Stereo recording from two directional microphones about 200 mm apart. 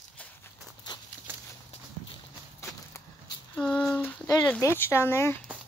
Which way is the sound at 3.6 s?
5° left (ahead or behind).